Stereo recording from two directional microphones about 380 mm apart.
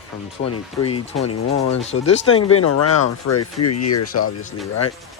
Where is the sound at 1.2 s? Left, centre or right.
Left.